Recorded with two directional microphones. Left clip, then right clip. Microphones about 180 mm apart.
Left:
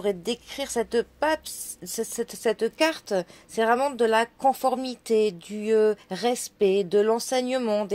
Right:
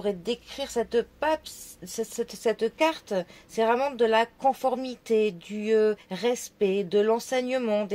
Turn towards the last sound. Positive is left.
turn(degrees=40)  # may be behind; listen again after turning